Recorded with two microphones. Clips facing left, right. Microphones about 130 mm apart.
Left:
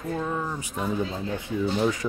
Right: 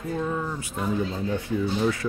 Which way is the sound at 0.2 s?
10° left (ahead or behind).